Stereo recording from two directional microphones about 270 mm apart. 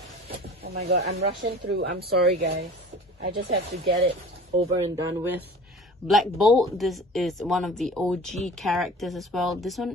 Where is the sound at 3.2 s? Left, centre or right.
Right.